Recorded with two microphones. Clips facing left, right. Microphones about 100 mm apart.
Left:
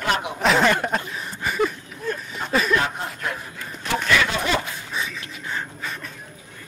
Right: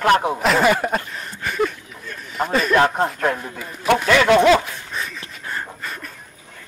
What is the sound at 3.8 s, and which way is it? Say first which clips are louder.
Speech: right 7 dB; 65° right (ahead or behind).